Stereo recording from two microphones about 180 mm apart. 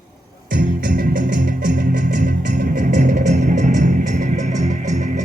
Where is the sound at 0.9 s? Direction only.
50° right (ahead or behind).